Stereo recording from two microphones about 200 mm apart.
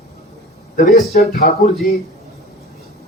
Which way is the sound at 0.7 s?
40° left (ahead or behind).